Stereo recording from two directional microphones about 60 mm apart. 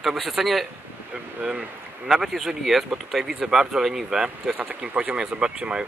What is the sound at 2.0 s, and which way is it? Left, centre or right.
Speech, centre.